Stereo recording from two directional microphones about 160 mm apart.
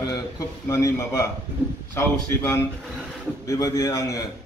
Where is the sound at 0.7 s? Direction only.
20° left (ahead or behind).